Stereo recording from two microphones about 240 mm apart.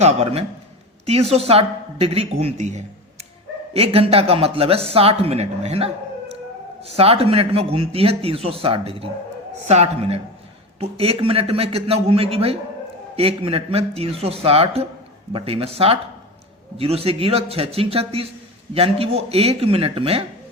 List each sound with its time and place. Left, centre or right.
0.0 s speech: right